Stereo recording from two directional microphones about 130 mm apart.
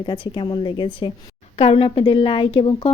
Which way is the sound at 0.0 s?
35° left (ahead or behind).